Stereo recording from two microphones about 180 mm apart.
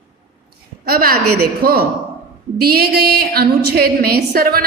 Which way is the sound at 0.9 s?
55° right (ahead or behind).